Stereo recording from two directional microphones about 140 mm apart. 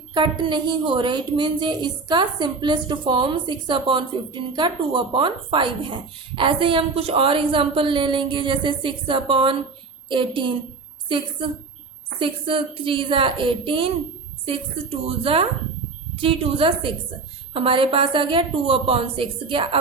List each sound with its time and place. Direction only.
0.1 s a woman's voice: 35° right (ahead or behind)
12.2 s a woman's voice: 40° right (ahead or behind)
15.0 s a woman's voice: 40° right (ahead or behind)